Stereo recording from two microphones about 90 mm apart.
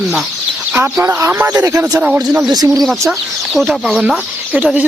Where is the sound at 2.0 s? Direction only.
15° right (ahead or behind).